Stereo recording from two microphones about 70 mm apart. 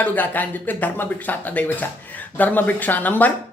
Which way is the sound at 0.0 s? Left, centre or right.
Left.